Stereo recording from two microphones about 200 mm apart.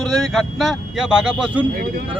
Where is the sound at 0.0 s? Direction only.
Centre (ahead or behind).